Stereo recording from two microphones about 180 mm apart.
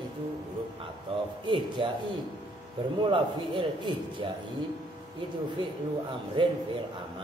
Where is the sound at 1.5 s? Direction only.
25° right (ahead or behind).